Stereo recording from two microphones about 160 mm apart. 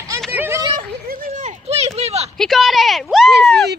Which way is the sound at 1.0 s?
55° right (ahead or behind).